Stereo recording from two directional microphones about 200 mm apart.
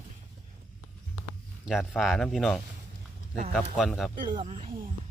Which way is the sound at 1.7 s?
Centre (ahead or behind).